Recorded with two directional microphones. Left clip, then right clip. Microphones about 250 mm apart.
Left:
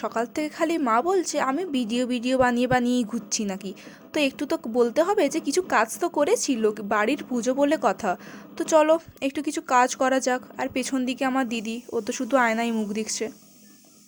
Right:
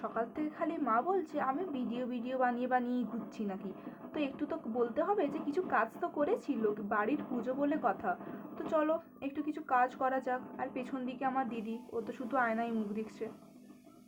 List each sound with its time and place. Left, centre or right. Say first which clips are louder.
0.0 s a woman's voice: left 10 dB; left